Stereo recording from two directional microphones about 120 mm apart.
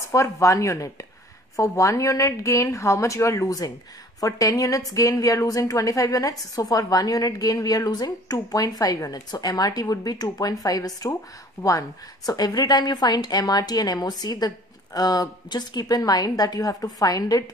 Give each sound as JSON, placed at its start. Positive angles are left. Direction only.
{"t": 0.1, "sound": "a woman's voice", "side_deg": 25}
{"t": 12.3, "sound": "a woman's voice", "side_deg": 30}